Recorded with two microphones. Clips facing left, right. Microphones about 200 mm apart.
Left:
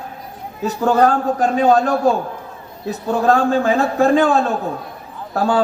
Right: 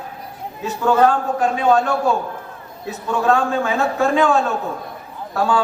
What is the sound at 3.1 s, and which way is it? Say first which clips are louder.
A man's voice: left 3 dB; 35° left (ahead or behind).